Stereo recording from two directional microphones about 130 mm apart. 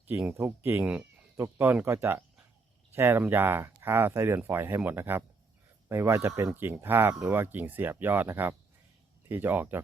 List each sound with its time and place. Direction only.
0.3 s speech: 20° right (ahead or behind)